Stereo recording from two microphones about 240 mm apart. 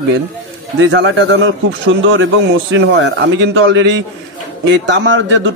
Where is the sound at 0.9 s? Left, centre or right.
Right.